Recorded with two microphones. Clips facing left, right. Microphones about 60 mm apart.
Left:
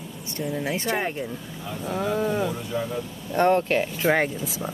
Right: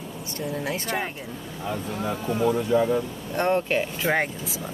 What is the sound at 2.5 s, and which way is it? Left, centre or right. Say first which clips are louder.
Speech: right 9 dB; right.